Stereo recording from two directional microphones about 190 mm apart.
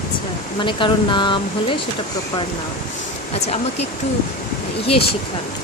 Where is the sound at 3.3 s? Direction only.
35° left (ahead or behind).